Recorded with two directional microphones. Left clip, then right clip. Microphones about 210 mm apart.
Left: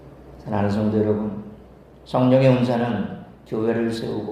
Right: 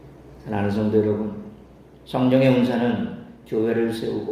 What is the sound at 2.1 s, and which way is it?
A man's voice, 15° left (ahead or behind).